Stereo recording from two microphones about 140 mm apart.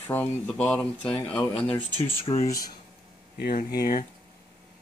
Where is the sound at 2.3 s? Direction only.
35° left (ahead or behind).